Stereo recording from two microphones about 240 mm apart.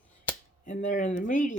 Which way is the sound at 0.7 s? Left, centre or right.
Left.